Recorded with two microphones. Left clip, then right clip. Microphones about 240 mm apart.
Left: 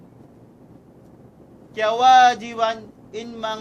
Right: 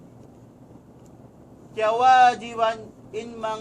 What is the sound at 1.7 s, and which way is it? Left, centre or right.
A man's voice, left.